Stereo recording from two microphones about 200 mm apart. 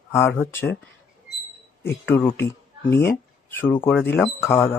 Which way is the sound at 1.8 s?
10° left (ahead or behind).